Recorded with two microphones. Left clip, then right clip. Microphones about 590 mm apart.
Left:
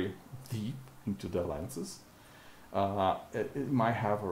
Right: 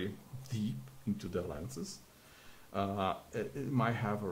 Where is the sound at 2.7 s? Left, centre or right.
Left.